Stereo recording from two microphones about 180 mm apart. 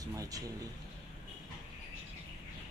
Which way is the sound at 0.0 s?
20° right (ahead or behind).